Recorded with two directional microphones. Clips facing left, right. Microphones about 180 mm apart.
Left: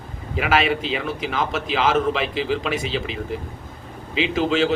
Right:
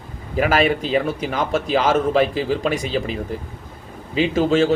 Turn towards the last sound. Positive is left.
turn(degrees=-40)  # may be behind; listen again after turning